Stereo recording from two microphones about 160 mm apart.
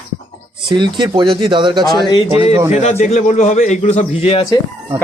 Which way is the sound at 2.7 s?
45° left (ahead or behind).